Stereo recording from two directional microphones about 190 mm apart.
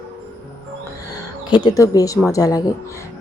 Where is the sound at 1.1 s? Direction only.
20° left (ahead or behind).